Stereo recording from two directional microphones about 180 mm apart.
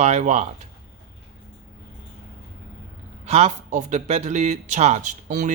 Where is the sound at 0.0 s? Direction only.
40° right (ahead or behind).